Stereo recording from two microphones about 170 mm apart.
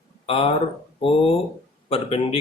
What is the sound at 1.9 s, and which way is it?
Speech, 35° left (ahead or behind).